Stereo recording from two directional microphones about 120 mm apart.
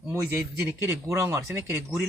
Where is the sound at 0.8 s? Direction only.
25° right (ahead or behind).